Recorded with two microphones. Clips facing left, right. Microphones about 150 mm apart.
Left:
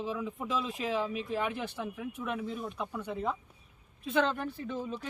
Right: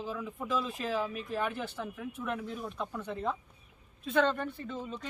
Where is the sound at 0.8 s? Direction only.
15° left (ahead or behind).